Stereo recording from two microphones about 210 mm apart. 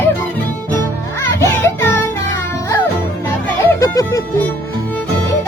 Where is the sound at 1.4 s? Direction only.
10° left (ahead or behind).